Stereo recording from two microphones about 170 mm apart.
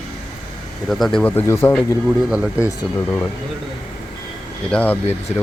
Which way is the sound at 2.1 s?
5° right (ahead or behind).